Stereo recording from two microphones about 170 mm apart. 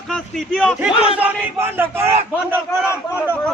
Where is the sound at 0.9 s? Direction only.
35° left (ahead or behind).